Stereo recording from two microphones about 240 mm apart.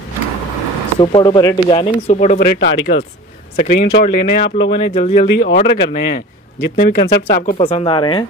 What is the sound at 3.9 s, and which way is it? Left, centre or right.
Speech, left.